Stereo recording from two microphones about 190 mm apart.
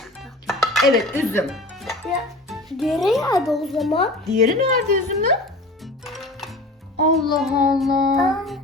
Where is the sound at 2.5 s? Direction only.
Centre (ahead or behind).